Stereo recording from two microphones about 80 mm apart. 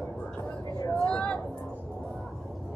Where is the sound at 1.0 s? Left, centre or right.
Centre.